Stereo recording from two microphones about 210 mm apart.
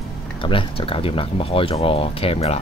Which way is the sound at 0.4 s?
25° left (ahead or behind).